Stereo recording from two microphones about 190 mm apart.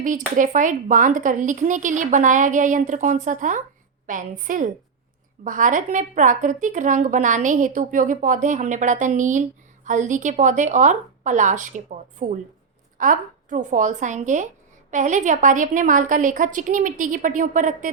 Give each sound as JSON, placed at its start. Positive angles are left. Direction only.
{"t": 0.3, "sound": "a woman's voice", "side_deg": -45}